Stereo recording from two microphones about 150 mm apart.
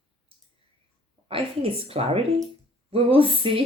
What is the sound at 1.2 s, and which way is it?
A woman's voice, 40° right (ahead or behind).